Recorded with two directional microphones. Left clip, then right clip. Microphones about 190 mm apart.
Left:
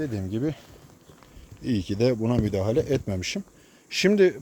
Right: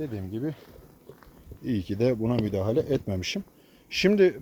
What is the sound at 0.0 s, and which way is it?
Speech, 60° left (ahead or behind).